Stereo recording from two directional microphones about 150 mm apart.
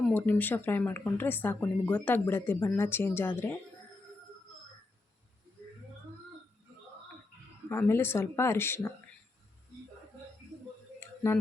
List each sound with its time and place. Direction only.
0.1 s speech: 10° left (ahead or behind)
7.7 s speech: 15° left (ahead or behind)